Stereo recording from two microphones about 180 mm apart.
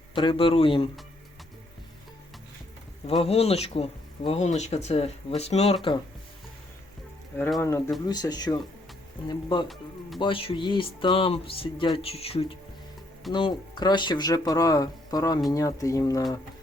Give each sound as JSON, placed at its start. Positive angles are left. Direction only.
{"t": 0.1, "sound": "speech", "side_deg": 30}
{"t": 3.1, "sound": "speech", "side_deg": 35}
{"t": 7.6, "sound": "speech", "side_deg": 15}